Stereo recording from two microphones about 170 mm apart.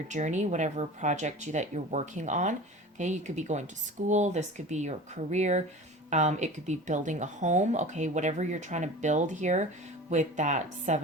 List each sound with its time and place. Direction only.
0.1 s speech: 45° right (ahead or behind)